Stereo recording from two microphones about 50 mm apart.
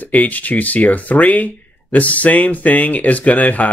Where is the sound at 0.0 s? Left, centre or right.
Left.